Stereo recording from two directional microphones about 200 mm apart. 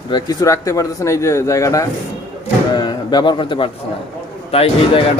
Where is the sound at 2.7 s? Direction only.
20° left (ahead or behind).